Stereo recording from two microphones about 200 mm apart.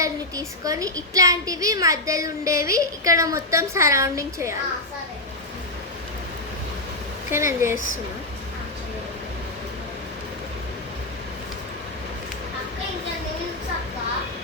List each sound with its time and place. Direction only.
0.0 s speech: 15° right (ahead or behind)
7.3 s speech: 15° right (ahead or behind)